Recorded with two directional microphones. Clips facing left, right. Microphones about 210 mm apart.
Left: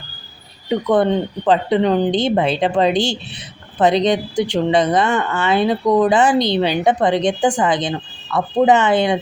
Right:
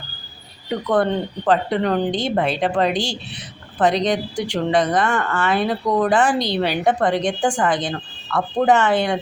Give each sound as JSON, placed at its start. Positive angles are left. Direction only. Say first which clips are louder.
{"t": 0.7, "sound": "speech", "louder": "left 4 dB", "side_deg": 20}